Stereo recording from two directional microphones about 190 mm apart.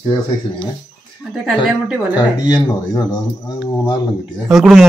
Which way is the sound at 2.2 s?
20° left (ahead or behind).